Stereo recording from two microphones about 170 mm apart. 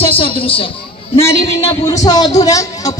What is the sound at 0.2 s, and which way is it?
Speech, 35° left (ahead or behind).